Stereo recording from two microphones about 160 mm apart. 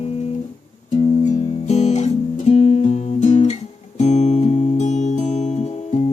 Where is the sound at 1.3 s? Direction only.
45° left (ahead or behind).